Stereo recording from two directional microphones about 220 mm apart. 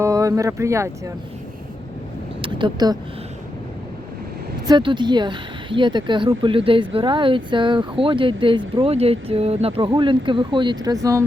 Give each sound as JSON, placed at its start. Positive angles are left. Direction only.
{"t": 0.0, "sound": "speech", "side_deg": -15}
{"t": 2.4, "sound": "a sound", "side_deg": -20}
{"t": 4.6, "sound": "speech", "side_deg": -20}